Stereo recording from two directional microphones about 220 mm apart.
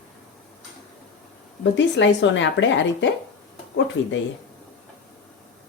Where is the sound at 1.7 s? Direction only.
55° left (ahead or behind).